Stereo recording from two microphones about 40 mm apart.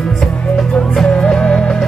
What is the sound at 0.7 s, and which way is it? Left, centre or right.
Music, left.